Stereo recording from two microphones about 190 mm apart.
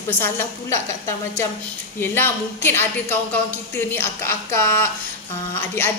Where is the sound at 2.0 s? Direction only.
10° left (ahead or behind).